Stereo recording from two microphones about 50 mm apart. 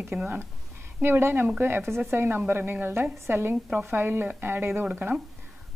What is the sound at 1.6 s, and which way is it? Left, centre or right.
Speech, right.